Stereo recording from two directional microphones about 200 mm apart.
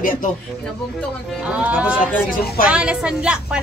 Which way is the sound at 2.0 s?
50° left (ahead or behind).